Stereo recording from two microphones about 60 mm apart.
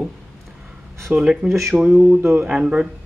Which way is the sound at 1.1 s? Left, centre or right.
Right.